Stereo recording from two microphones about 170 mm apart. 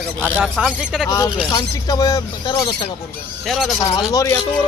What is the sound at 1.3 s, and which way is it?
Speech, 20° left (ahead or behind).